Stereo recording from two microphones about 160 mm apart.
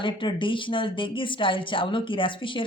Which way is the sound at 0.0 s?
30° left (ahead or behind).